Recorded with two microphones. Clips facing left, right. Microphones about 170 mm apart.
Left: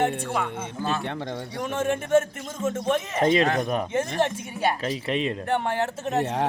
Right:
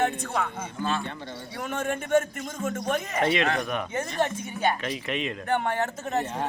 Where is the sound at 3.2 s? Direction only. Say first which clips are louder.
Left 4 dB; 35° left (ahead or behind).